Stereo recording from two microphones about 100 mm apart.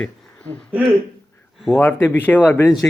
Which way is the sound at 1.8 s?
25° left (ahead or behind).